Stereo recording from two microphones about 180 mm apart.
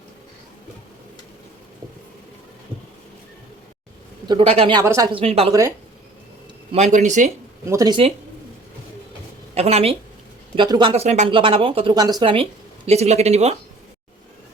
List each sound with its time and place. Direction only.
4.3 s speech: 30° right (ahead or behind)
5.2 s speech: 35° right (ahead or behind)
5.5 s speech: 15° right (ahead or behind)
6.7 s speech: 40° right (ahead or behind)
7.6 s speech: 15° right (ahead or behind)
9.6 s speech: 35° right (ahead or behind)